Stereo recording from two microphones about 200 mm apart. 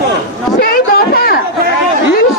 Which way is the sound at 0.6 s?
50° left (ahead or behind).